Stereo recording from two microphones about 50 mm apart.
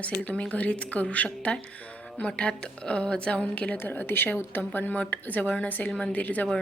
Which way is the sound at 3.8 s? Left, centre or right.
Left.